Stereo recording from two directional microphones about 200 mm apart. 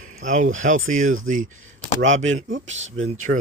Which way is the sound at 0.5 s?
40° right (ahead or behind).